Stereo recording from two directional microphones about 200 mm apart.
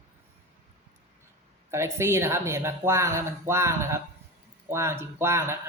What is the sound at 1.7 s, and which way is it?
Speech, 15° right (ahead or behind).